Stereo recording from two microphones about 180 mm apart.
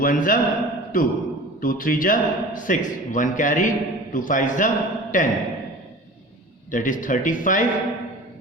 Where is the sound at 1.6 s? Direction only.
50° left (ahead or behind).